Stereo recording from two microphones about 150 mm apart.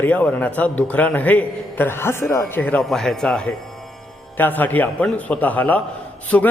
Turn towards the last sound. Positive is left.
turn(degrees=10)  # may be behind; listen again after turning